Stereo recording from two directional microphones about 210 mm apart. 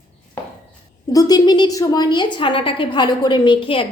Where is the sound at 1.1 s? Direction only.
15° left (ahead or behind).